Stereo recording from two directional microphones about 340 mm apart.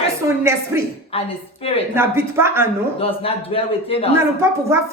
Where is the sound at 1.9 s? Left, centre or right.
Centre.